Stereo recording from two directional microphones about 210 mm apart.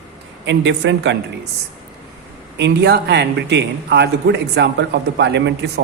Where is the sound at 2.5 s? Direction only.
55° right (ahead or behind).